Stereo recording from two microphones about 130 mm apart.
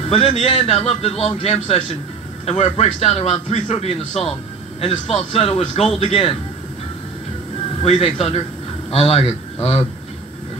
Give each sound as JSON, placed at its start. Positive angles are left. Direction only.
{"t": 0.1, "sound": "a man's voice", "side_deg": 50}
{"t": 7.8, "sound": "a man's voice", "side_deg": 50}